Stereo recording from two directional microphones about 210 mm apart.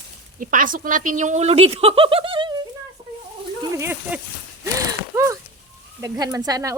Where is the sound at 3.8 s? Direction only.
10° right (ahead or behind).